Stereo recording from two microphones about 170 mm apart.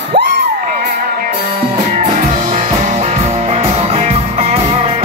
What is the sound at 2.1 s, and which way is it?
Music, 50° right (ahead or behind).